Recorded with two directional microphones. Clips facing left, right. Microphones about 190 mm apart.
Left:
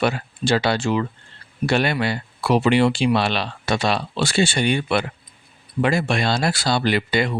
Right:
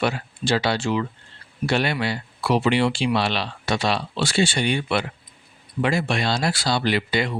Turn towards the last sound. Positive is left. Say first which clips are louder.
# left 2 dB
turn(degrees=50)  # may be behind; listen again after turning